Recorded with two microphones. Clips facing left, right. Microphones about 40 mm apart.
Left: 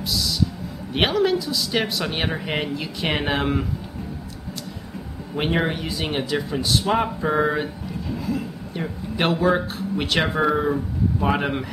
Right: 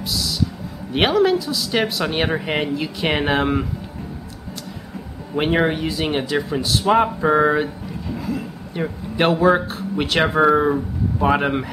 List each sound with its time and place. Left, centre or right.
0.0 s music: centre
0.9 s speech: centre
5.3 s speech: centre
7.2 s a sound: centre
8.8 s speech: centre